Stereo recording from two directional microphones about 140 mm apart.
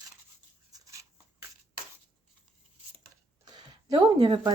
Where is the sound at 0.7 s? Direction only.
20° right (ahead or behind).